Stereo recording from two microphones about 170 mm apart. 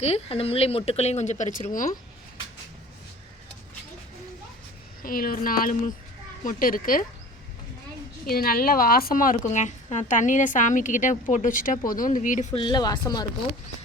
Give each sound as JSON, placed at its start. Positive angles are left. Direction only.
{"t": 0.0, "sound": "speech", "side_deg": 35}
{"t": 5.0, "sound": "speech", "side_deg": 55}
{"t": 8.3, "sound": "a woman's voice", "side_deg": 60}
{"t": 12.5, "sound": "speech", "side_deg": 25}